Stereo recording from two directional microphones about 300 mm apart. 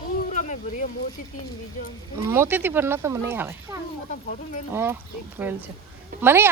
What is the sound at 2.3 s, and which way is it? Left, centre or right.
Speech, centre.